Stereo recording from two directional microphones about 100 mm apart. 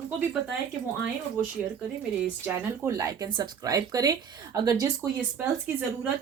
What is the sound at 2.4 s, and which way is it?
A woman's voice, 20° right (ahead or behind).